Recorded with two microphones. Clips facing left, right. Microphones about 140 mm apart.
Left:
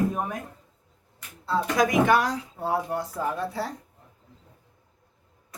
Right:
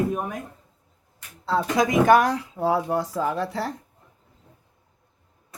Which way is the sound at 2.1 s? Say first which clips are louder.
Right 5 dB; 60° right (ahead or behind).